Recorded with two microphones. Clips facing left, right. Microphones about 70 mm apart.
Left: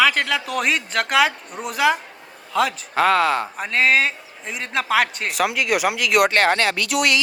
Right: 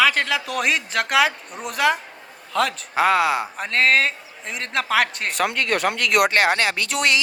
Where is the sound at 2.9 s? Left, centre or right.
Centre.